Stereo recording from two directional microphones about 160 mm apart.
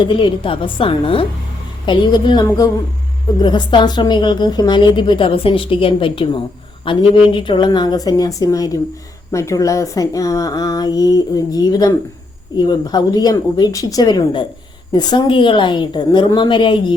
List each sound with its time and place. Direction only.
0.0 s a woman's voice: 30° left (ahead or behind)